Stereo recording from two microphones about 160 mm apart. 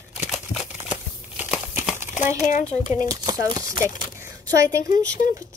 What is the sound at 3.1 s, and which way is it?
Speech, 25° right (ahead or behind).